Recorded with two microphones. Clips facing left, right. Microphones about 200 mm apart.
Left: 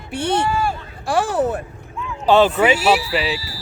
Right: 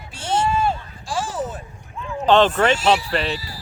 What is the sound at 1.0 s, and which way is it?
Speech, 60° left (ahead or behind).